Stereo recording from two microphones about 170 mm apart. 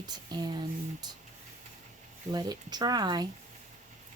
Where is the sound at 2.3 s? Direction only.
25° right (ahead or behind).